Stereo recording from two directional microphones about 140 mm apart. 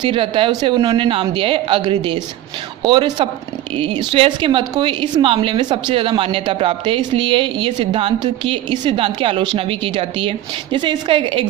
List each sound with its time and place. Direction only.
0.0 s a woman's voice: 40° right (ahead or behind)